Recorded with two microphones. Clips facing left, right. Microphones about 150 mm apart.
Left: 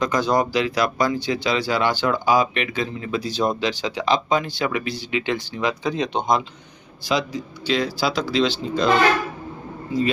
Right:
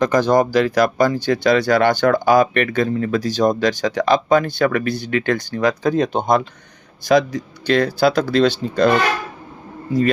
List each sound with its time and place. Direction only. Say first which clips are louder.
0.0 s speech: right 5 dB; 45° right (ahead or behind)